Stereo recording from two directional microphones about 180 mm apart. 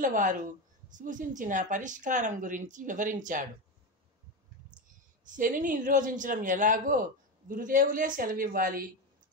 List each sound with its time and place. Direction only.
0.0 s speech: 45° right (ahead or behind)
4.8 s speech: 45° right (ahead or behind)